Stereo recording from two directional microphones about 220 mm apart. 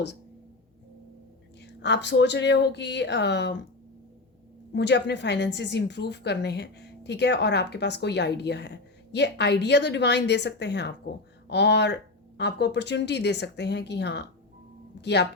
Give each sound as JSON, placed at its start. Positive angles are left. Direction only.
{"t": 1.6, "sound": "a woman's voice", "side_deg": 50}
{"t": 4.7, "sound": "a woman's voice", "side_deg": 50}